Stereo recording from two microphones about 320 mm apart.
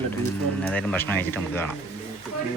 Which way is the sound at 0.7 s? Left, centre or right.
Centre.